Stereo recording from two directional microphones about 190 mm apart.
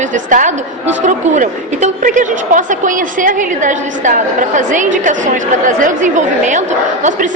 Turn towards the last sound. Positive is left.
turn(degrees=-40)  # may be behind; listen again after turning